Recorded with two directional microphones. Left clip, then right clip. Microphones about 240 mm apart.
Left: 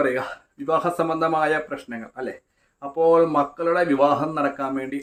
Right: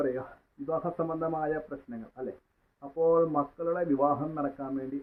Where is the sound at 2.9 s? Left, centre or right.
Left.